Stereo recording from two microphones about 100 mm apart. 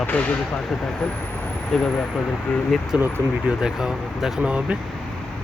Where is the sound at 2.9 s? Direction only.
10° right (ahead or behind).